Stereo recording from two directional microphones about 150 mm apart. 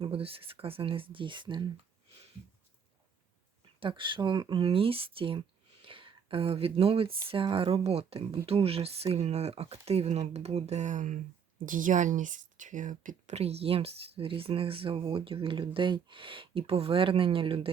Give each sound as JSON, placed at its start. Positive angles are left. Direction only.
{"t": 0.0, "sound": "speech", "side_deg": -40}
{"t": 3.8, "sound": "speech", "side_deg": -35}